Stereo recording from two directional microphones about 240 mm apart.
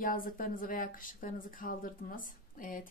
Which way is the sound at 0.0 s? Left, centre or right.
Left.